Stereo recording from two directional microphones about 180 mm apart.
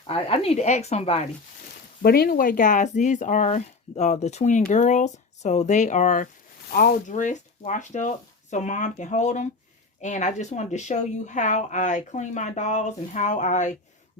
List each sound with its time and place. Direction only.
0.1 s speech: 35° left (ahead or behind)
2.0 s speech: 60° left (ahead or behind); by 6.2 s 40° left (ahead or behind)
6.7 s speech: 55° left (ahead or behind)